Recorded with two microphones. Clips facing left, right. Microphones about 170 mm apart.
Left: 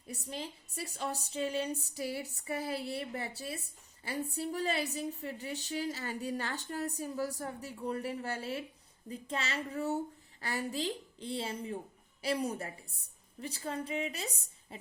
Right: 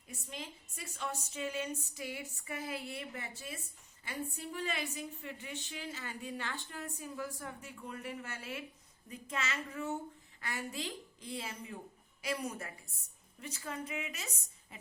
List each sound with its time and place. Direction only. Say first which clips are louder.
0.1 s a woman's voice: left 5 dB; 35° left (ahead or behind)